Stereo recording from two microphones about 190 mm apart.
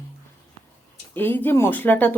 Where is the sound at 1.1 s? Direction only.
10° left (ahead or behind).